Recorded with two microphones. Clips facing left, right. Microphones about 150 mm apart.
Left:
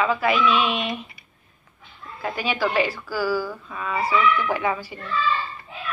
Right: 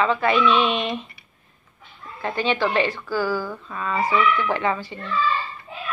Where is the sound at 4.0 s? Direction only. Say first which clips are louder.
Right 1 dB; 15° right (ahead or behind).